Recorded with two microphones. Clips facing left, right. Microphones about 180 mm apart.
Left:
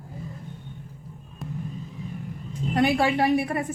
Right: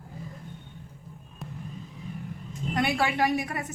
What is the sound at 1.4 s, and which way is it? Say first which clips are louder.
Vehicle: left 6 dB; centre (ahead or behind).